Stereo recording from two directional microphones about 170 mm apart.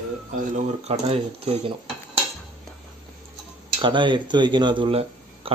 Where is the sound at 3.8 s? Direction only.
30° right (ahead or behind).